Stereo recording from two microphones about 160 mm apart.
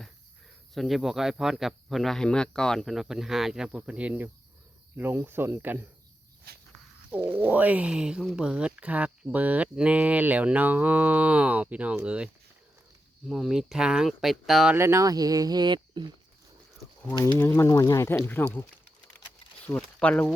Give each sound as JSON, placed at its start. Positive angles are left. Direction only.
{"t": 0.7, "sound": "speech", "side_deg": 0}
{"t": 6.5, "sound": "walk", "side_deg": -80}
{"t": 7.1, "sound": "speech", "side_deg": -10}
{"t": 14.8, "sound": "speech", "side_deg": -15}
{"t": 17.3, "sound": "speech", "side_deg": 15}